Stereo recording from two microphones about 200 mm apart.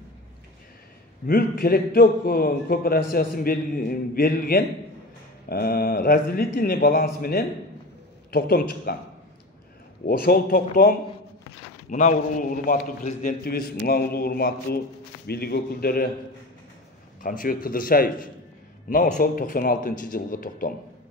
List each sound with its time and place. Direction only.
1.2 s a man's voice: 50° left (ahead or behind)
10.0 s a man's voice: 50° left (ahead or behind)
17.2 s a man's voice: 45° left (ahead or behind)